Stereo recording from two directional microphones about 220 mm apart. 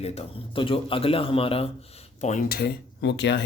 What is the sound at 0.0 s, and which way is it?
A man's voice, 30° left (ahead or behind).